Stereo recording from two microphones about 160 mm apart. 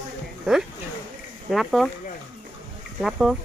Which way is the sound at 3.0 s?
Centre (ahead or behind).